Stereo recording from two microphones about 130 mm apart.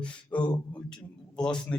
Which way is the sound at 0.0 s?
10° left (ahead or behind).